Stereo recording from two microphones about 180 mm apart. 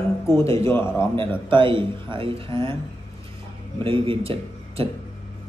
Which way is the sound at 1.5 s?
25° right (ahead or behind).